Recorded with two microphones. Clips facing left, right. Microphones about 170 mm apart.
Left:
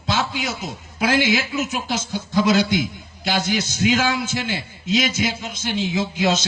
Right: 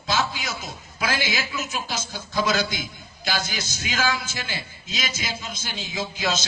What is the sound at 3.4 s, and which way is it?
A man's voice, 70° left (ahead or behind).